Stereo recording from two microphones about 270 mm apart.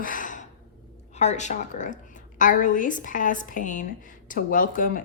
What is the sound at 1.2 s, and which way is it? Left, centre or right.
Speech, left.